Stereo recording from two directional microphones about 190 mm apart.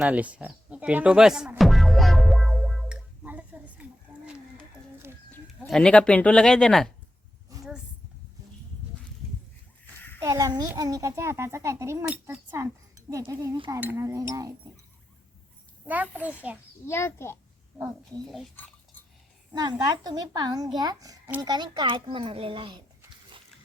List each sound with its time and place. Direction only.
0.0 s music: 5° right (ahead or behind)
4.1 s a sound: 5° right (ahead or behind)
5.5 s speech: centre (ahead or behind)
7.5 s a sound: 20° right (ahead or behind)
10.2 s a child's voice: 20° right (ahead or behind)
15.9 s a child's voice: 10° right (ahead or behind)
16.8 s a child's voice: 15° left (ahead or behind)
18.3 s speech: centre (ahead or behind)
19.5 s speech: 20° right (ahead or behind)